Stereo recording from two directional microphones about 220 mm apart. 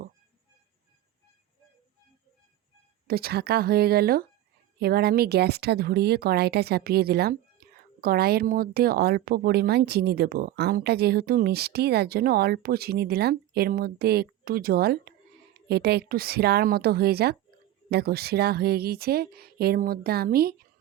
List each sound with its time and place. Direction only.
3.1 s speech: 45° right (ahead or behind)